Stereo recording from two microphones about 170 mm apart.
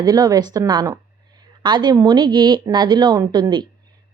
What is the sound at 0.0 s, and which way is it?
A woman's voice, 20° right (ahead or behind).